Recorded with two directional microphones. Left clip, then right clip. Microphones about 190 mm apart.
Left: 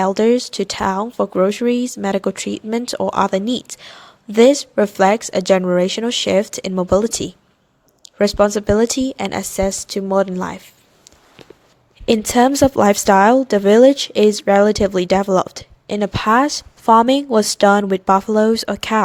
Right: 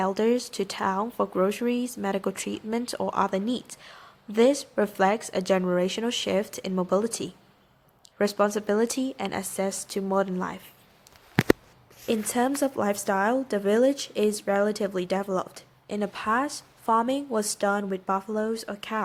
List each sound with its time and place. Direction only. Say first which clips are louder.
0.0 s speech: left 10 dB; 30° left (ahead or behind)
12.0 s speech: left 12 dB; 45° left (ahead or behind)